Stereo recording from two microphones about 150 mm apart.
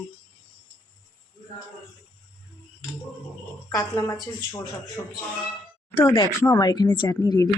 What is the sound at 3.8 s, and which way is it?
Speech, 20° left (ahead or behind).